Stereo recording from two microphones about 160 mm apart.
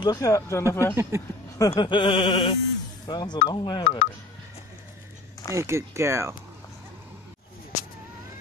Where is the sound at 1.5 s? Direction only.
25° left (ahead or behind).